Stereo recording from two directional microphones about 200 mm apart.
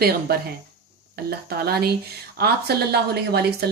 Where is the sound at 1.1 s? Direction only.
50° right (ahead or behind).